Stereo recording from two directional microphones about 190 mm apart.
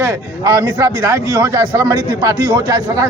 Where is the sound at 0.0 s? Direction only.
20° right (ahead or behind).